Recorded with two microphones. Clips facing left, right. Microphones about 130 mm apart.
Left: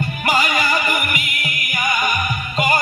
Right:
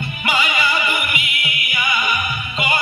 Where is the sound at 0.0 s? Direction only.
40° left (ahead or behind).